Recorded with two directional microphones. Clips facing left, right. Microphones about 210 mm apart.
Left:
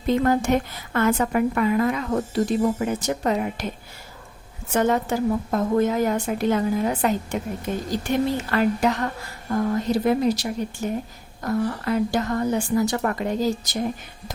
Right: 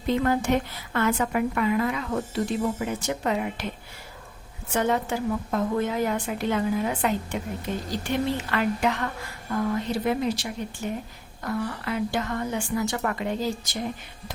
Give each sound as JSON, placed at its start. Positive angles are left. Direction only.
{"t": 0.1, "sound": "a woman's voice", "side_deg": 45}
{"t": 4.7, "sound": "a woman's voice", "side_deg": 45}